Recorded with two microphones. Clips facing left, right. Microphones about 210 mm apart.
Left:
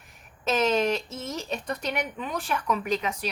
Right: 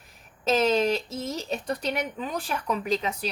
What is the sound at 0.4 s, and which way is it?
Speech, 35° right (ahead or behind).